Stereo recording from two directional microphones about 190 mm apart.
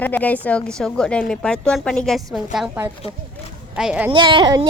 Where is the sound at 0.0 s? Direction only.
10° left (ahead or behind).